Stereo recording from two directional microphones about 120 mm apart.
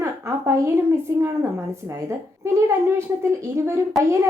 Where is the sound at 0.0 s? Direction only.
25° right (ahead or behind).